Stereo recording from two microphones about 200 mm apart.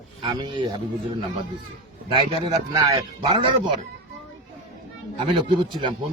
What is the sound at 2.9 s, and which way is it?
Speech, 20° right (ahead or behind).